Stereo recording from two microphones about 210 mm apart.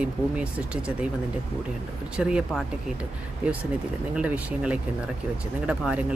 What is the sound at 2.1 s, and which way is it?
Speech, 5° right (ahead or behind).